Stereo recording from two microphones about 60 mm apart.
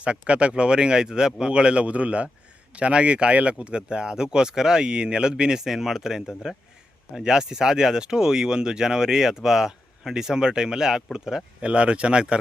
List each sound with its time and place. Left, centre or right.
0.0 s speech: centre